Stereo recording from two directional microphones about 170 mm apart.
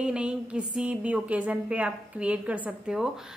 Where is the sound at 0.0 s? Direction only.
5° right (ahead or behind).